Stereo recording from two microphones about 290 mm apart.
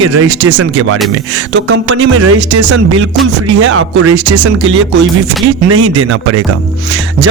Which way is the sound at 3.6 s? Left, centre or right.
Right.